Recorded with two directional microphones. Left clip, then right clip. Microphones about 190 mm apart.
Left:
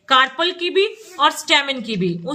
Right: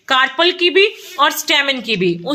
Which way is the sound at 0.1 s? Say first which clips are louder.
Right 2 dB; 35° right (ahead or behind).